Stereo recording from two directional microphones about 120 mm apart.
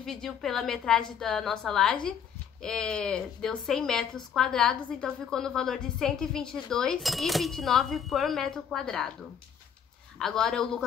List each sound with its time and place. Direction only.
0.0 s a woman's voice: 5° left (ahead or behind)
10.1 s a woman's voice: 5° left (ahead or behind)